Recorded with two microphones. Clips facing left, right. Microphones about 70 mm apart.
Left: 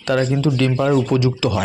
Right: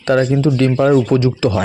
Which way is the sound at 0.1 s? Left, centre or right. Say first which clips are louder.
Right 4 dB; right.